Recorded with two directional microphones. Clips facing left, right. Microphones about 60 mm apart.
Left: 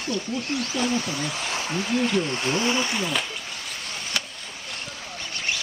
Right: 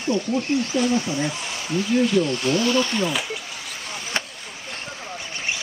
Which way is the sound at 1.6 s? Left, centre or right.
Left.